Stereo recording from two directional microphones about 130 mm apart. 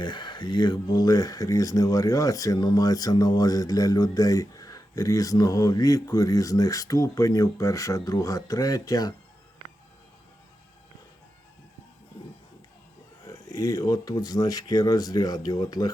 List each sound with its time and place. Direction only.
0.0 s speech: 35° left (ahead or behind)
13.2 s speech: 30° left (ahead or behind)